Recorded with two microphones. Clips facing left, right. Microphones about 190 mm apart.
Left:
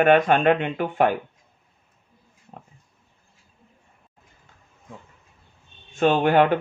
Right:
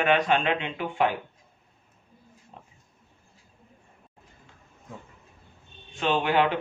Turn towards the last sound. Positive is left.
turn(degrees=50)  # may be behind; listen again after turning